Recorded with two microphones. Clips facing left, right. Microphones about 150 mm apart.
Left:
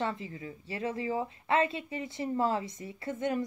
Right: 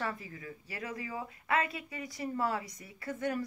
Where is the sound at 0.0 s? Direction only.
25° left (ahead or behind).